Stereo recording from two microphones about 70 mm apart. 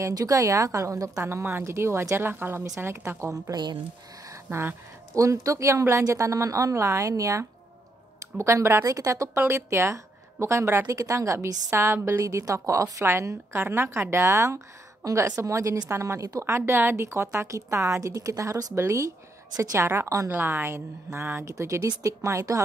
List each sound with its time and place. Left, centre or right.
0.0 s a woman's voice: right
3.1 s a woman's voice: right
4.3 s a sound: right
5.1 s a woman's voice: right
9.5 s a woman's voice: right
20.4 s a woman's voice: right